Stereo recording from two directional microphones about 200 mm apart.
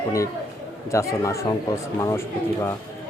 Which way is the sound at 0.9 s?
15° left (ahead or behind).